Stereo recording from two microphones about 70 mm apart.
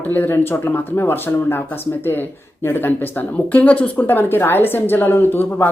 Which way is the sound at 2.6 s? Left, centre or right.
Left.